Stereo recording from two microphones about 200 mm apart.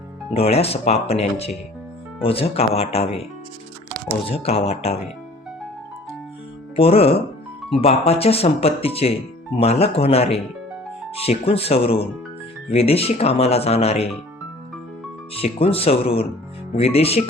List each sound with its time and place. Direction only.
0.3 s speech: 30° left (ahead or behind)
6.7 s speech: 30° left (ahead or behind)
15.4 s speech: 30° left (ahead or behind)